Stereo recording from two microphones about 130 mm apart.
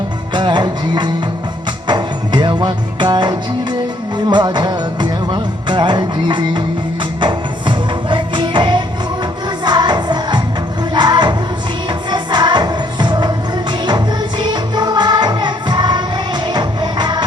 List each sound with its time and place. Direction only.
0.3 s music: 35° right (ahead or behind)